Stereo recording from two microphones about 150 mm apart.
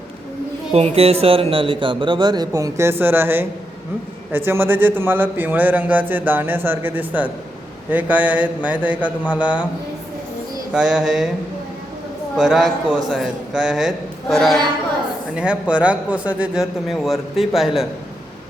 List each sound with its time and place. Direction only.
0.7 s speech: 40° right (ahead or behind); by 9.6 s 10° right (ahead or behind)
10.7 s a man's voice: 5° right (ahead or behind)
12.4 s a man's voice: centre (ahead or behind)